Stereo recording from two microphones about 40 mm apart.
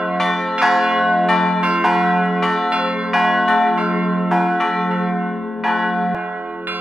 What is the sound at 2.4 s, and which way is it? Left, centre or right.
Church bell, centre.